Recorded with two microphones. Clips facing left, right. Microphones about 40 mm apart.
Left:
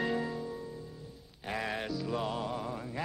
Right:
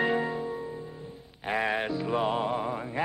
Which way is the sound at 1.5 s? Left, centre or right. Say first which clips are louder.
Right 7 dB; right.